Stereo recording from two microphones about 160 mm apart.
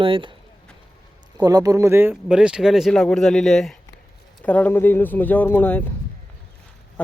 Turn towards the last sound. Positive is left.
turn(degrees=10)  # may be behind; listen again after turning